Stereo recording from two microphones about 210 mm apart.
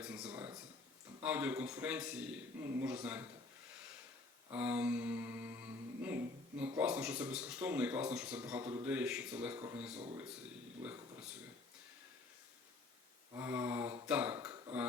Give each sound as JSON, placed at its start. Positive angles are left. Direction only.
{"t": 0.0, "sound": "a sound", "side_deg": -5}
{"t": 1.2, "sound": "mantra", "side_deg": -5}
{"t": 4.5, "sound": "mantra", "side_deg": -5}
{"t": 9.6, "sound": "speech", "side_deg": -5}
{"t": 10.8, "sound": "mantra", "side_deg": -5}
{"t": 13.3, "sound": "mantra", "side_deg": -10}
{"t": 14.1, "sound": "speech", "side_deg": -10}